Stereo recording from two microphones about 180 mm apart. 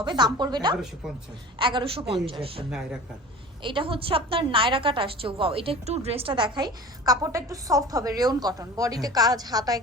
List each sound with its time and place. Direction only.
0.0 s a woman's voice: 25° right (ahead or behind)
2.6 s speech: 5° right (ahead or behind)
3.6 s a woman's voice: 30° right (ahead or behind)